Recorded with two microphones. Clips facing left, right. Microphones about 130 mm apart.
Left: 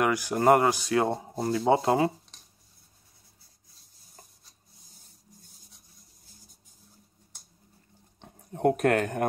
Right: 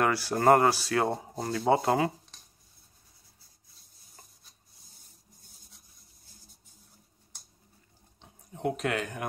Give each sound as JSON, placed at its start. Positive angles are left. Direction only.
{"t": 0.0, "sound": "speech", "side_deg": 15}
{"t": 8.2, "sound": "speech", "side_deg": 55}